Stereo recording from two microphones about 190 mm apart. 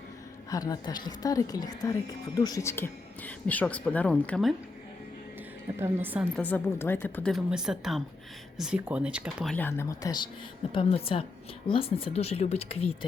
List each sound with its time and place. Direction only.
0.5 s a woman's voice: 20° left (ahead or behind); by 4.5 s 5° left (ahead or behind)
5.8 s a woman's voice: 10° right (ahead or behind)
6.3 s a woman's voice: 10° left (ahead or behind)
9.6 s a woman's voice: 10° left (ahead or behind); by 13.1 s 30° left (ahead or behind)